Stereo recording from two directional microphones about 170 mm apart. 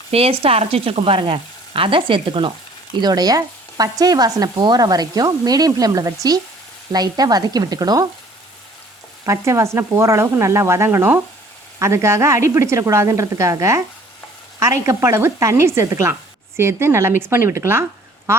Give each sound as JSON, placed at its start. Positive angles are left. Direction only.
{"t": 0.1, "sound": "speech", "side_deg": -35}
{"t": 9.2, "sound": "a woman's voice", "side_deg": -15}